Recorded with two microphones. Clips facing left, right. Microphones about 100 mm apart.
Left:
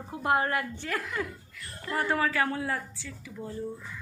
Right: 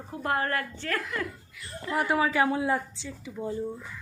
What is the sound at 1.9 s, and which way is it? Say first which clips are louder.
Speech: right 2 dB; 10° right (ahead or behind).